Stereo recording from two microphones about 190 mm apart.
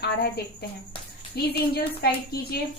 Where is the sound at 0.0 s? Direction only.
60° left (ahead or behind).